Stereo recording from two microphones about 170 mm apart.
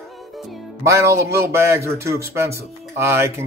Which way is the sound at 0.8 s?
15° right (ahead or behind).